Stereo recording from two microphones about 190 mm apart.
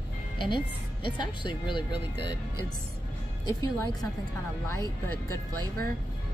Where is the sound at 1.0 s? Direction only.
25° left (ahead or behind).